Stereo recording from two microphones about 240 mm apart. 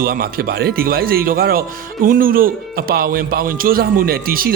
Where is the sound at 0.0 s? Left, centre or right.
Right.